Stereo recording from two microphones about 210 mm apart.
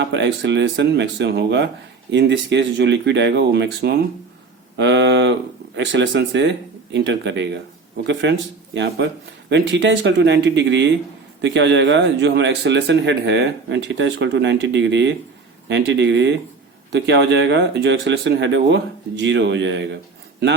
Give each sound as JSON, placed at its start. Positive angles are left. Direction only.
{"t": 0.0, "sound": "speech", "side_deg": -55}